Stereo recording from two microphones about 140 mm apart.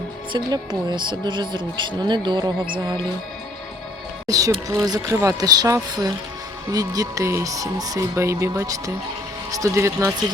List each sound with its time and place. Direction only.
0.3 s speech: 30° right (ahead or behind)
4.3 s speech: 25° right (ahead or behind)